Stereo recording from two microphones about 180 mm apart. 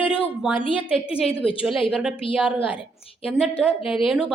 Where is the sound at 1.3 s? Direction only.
30° left (ahead or behind).